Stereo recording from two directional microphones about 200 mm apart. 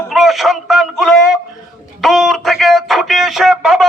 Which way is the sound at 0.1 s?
Centre (ahead or behind).